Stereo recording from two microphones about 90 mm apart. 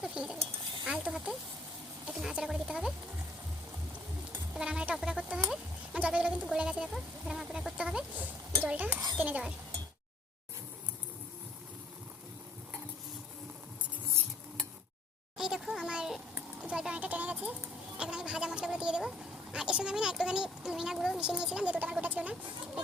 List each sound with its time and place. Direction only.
0.0 s speech: 10° right (ahead or behind)
4.5 s speech: 10° right (ahead or behind)
15.4 s a sound: 5° right (ahead or behind)